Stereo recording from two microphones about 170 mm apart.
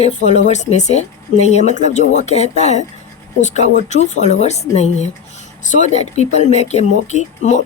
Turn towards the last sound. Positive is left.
turn(degrees=45)  # may be behind; listen again after turning